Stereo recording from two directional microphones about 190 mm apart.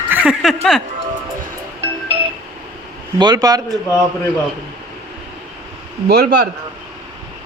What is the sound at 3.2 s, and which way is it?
Speech, 20° right (ahead or behind).